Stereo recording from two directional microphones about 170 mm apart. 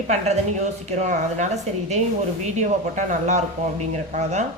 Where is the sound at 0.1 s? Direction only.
40° right (ahead or behind).